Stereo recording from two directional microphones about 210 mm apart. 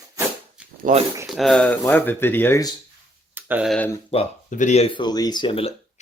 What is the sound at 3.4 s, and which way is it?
Speech, 10° right (ahead or behind).